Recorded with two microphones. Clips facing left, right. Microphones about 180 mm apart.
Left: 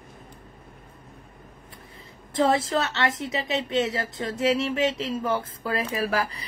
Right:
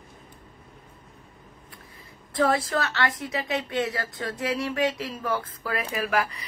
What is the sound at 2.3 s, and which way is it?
A woman's voice, 25° left (ahead or behind).